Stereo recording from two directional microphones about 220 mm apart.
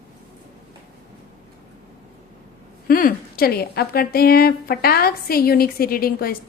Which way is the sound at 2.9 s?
40° left (ahead or behind).